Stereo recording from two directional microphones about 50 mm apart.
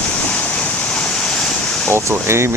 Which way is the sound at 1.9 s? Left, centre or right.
Right.